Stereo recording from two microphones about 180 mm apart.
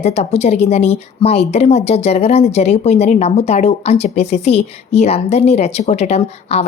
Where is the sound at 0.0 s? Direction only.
35° left (ahead or behind).